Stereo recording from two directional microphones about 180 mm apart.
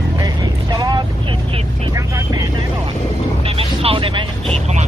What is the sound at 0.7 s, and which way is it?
Vehicle, 20° right (ahead or behind).